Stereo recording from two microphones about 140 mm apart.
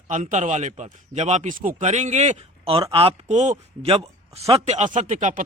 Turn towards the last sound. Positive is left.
turn(degrees=-60)  # may be behind; listen again after turning